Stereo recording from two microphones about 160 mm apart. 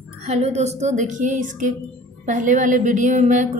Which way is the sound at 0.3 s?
45° right (ahead or behind).